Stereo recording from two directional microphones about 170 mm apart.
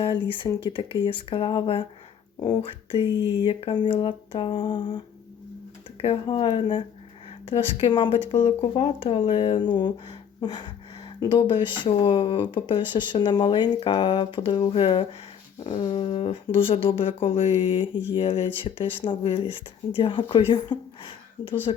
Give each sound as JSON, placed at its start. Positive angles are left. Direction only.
{"t": 0.0, "sound": "speech", "side_deg": 30}